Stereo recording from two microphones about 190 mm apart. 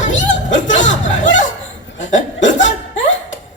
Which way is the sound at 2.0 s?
40° left (ahead or behind).